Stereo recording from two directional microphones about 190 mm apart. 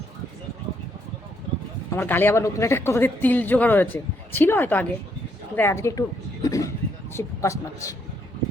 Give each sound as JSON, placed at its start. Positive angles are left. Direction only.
{"t": 1.9, "sound": "speech", "side_deg": 10}